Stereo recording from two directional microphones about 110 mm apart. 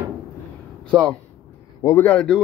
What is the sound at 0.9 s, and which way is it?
Speech, 5° left (ahead or behind).